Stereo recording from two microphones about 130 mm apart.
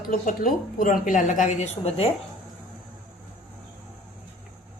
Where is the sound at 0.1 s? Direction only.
90° left; by 2.1 s 50° left (ahead or behind).